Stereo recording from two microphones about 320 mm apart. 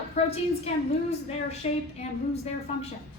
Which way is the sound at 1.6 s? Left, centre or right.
Centre.